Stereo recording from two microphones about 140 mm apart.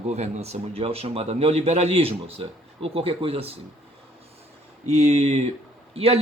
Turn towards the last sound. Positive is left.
turn(degrees=-45)  # may be behind; listen again after turning